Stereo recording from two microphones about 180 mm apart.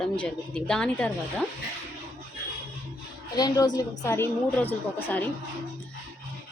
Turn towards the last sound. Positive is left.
turn(degrees=10)  # may be behind; listen again after turning